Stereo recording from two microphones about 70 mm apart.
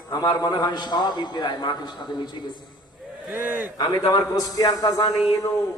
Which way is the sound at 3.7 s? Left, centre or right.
Left.